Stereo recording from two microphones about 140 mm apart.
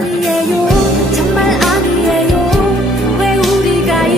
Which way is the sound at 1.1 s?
Centre (ahead or behind).